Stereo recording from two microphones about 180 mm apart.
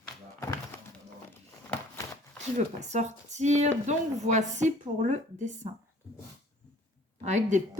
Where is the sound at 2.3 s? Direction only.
40° right (ahead or behind).